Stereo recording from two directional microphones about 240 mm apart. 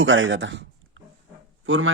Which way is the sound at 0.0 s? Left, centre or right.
Right.